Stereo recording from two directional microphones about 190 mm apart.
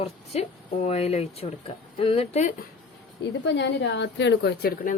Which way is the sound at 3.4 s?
65° left (ahead or behind).